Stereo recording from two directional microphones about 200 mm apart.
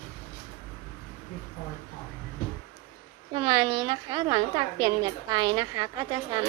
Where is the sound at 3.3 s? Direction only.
25° right (ahead or behind).